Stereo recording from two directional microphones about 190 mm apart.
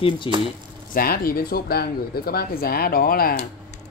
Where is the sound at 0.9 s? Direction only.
50° left (ahead or behind).